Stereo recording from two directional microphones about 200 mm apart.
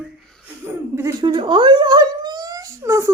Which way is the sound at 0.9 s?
15° right (ahead or behind).